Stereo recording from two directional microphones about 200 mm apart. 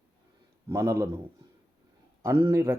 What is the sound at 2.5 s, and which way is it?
Speech, 15° right (ahead or behind).